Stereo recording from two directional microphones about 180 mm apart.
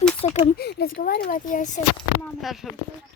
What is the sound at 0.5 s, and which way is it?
Speech, 60° left (ahead or behind).